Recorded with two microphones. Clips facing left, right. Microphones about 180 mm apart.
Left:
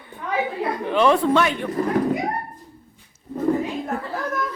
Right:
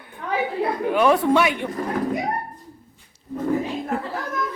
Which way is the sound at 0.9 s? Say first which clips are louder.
Even; 10° right (ahead or behind).